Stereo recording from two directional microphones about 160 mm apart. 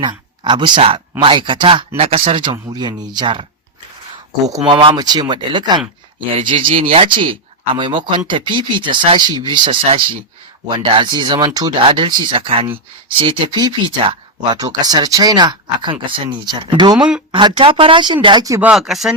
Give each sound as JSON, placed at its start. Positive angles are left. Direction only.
{"t": 0.0, "sound": "speech", "side_deg": -30}
{"t": 4.6, "sound": "speech", "side_deg": -30}
{"t": 10.8, "sound": "speech", "side_deg": -30}
{"t": 18.6, "sound": "speech", "side_deg": -5}